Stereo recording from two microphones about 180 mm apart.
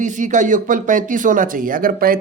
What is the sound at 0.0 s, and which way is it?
Speech, 45° right (ahead or behind).